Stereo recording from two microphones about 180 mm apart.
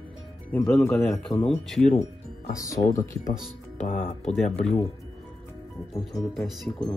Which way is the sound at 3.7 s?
45° left (ahead or behind).